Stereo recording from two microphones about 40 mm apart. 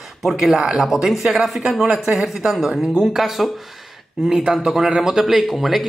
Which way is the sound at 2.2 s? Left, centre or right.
Centre.